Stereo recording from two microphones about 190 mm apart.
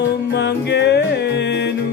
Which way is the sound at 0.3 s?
65° left (ahead or behind).